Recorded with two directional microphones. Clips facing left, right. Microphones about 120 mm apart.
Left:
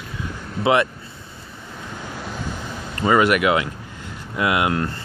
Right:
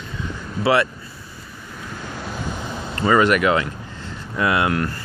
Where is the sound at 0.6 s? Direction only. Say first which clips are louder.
Even; 20° left (ahead or behind).